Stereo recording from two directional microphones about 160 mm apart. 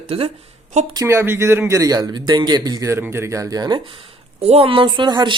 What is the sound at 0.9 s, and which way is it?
A man's voice, 15° right (ahead or behind).